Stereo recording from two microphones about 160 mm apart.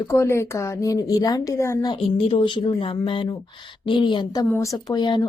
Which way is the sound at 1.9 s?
35° left (ahead or behind).